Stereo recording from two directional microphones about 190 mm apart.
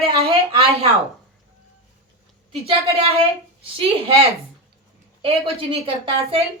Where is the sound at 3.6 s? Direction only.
30° right (ahead or behind).